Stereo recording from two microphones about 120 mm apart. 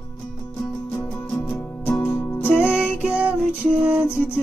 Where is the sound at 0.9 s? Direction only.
15° left (ahead or behind).